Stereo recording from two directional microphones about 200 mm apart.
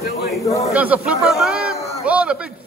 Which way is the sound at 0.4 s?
15° left (ahead or behind).